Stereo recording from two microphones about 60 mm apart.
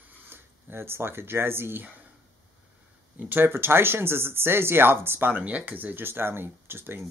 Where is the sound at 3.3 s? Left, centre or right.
Right.